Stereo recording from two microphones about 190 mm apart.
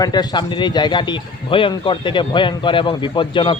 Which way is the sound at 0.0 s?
20° left (ahead or behind).